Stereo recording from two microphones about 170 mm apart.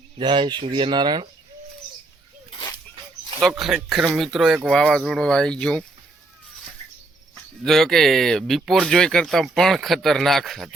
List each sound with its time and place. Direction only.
0.2 s speech: 30° right (ahead or behind)
3.6 s speech: centre (ahead or behind)
7.6 s speech: centre (ahead or behind)